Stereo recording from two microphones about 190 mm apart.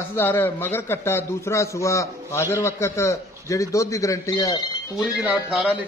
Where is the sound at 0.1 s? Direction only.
10° left (ahead or behind).